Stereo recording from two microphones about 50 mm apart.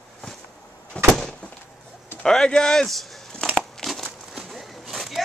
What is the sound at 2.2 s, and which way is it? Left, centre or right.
Speech, centre.